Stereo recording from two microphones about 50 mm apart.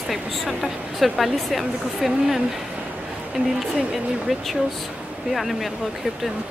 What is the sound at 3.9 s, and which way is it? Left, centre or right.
A woman's voice, centre.